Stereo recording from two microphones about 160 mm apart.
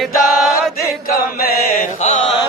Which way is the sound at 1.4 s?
70° left (ahead or behind).